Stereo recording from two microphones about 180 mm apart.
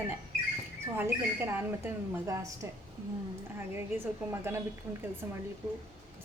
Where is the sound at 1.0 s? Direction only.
10° right (ahead or behind).